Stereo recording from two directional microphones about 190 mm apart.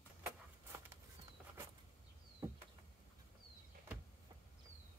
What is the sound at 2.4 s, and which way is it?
Insect, 15° right (ahead or behind).